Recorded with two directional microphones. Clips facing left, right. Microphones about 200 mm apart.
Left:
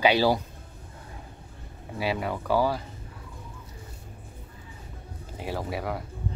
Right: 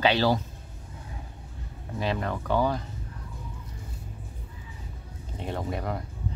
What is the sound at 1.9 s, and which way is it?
Speech, 10° left (ahead or behind).